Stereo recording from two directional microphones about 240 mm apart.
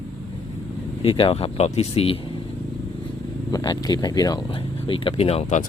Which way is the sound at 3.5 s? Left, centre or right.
Centre.